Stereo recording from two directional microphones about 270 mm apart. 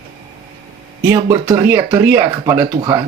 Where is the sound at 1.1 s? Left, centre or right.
Centre.